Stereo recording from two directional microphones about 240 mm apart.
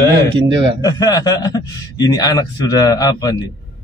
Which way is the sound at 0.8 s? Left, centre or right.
Centre.